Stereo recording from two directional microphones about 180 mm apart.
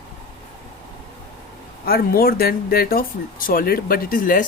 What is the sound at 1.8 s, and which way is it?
Speech, 55° left (ahead or behind).